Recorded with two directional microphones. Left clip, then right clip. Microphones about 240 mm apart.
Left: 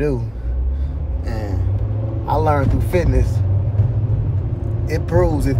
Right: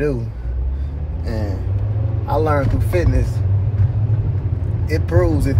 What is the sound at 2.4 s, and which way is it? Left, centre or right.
Speech, centre.